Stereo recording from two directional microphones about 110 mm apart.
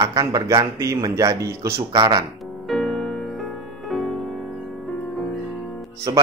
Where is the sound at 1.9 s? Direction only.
40° right (ahead or behind).